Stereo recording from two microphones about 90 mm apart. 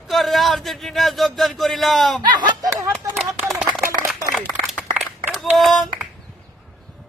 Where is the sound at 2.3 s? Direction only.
55° right (ahead or behind).